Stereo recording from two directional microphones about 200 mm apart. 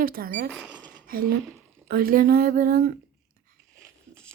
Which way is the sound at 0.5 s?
5° right (ahead or behind).